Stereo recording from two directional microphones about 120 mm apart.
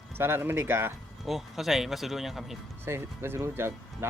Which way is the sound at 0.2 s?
20° right (ahead or behind).